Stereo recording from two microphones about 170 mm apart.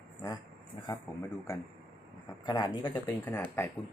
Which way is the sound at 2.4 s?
25° left (ahead or behind).